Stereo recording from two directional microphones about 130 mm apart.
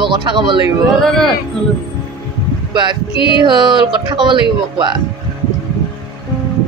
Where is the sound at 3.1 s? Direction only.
40° left (ahead or behind).